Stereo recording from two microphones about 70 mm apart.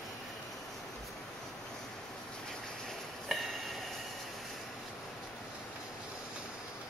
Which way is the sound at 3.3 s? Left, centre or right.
Centre.